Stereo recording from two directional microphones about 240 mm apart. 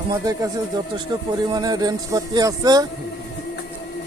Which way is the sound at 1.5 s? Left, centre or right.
Centre.